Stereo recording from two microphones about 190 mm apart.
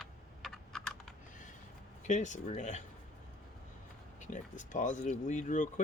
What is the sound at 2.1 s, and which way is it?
Speech, 40° left (ahead or behind).